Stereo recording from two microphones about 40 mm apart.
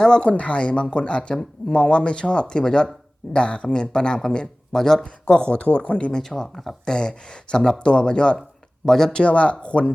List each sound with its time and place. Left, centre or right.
0.0 s speech: centre
0.3 s speech: left; by 4.9 s centre
5.2 s speech: left
5.6 s speech: left
6.1 s speech: centre
8.9 s speech: centre
9.1 s speech: left